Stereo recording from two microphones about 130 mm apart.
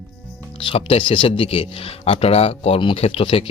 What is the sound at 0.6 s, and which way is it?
Speech, 45° left (ahead or behind).